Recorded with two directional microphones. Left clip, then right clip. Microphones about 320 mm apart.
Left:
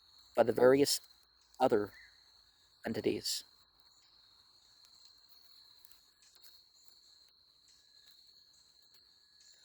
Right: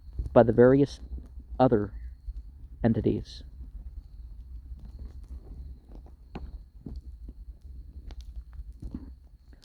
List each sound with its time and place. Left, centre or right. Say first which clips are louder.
0.3 s speech: right 7 dB; centre
2.9 s speech: right 5 dB; centre